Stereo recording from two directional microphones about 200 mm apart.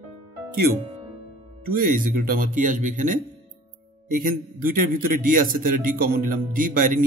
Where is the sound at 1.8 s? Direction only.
45° right (ahead or behind).